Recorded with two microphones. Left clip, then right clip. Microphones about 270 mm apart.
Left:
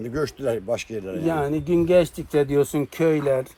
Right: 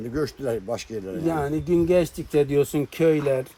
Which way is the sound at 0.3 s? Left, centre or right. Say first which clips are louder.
Left 3 dB; left.